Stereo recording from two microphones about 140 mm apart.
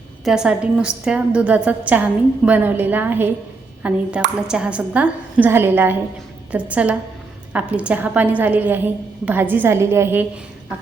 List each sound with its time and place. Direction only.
0.3 s a woman's voice: 5° right (ahead or behind)